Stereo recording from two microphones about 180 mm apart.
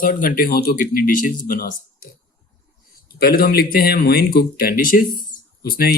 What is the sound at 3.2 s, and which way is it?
Speech, 55° left (ahead or behind).